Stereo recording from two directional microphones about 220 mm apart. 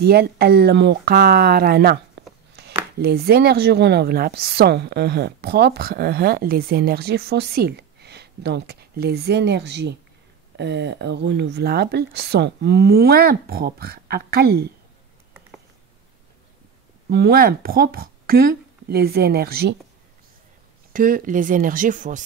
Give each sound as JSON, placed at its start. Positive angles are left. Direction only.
{"t": 0.0, "sound": "speech", "side_deg": -45}
{"t": 17.1, "sound": "speech", "side_deg": -45}
{"t": 20.9, "sound": "speech", "side_deg": -40}